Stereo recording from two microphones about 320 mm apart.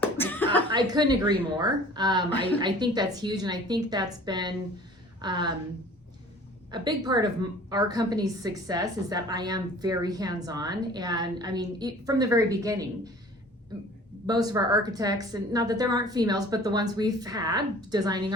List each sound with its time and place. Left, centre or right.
0.0 s cough: centre
0.7 s a woman's voice: centre
6.7 s a woman's voice: centre
14.3 s a woman's voice: centre